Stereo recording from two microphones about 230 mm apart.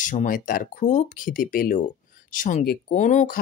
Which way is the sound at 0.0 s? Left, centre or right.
Left.